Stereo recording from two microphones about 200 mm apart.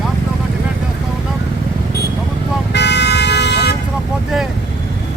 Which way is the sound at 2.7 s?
60° left (ahead or behind).